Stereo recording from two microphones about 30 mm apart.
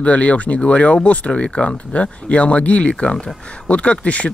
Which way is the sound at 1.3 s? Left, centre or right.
Left.